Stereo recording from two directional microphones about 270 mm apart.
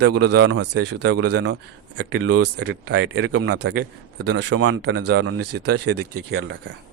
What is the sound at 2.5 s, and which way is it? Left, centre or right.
Speech, right.